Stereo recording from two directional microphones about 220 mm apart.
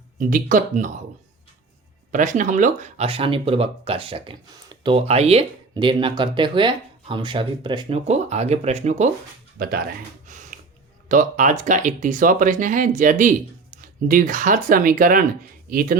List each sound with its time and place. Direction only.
0.2 s speech: 35° right (ahead or behind)
2.1 s speech: 35° right (ahead or behind)
9.6 s speech: 45° right (ahead or behind)
11.1 s speech: 35° right (ahead or behind)